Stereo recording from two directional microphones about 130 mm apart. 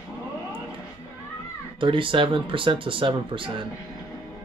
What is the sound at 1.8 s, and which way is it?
Speech, 40° right (ahead or behind).